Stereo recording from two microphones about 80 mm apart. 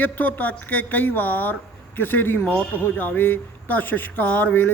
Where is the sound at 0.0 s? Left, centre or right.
Left.